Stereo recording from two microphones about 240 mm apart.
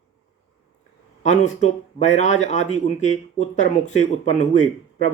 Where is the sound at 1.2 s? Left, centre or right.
Left.